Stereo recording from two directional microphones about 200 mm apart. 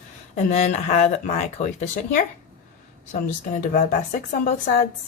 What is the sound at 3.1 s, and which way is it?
Speech, 45° left (ahead or behind).